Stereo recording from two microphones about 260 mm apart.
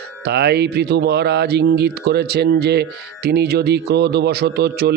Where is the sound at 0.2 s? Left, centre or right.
Right.